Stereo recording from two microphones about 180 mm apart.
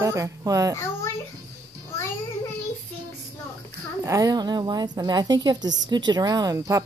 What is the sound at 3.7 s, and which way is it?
Speech, 15° right (ahead or behind).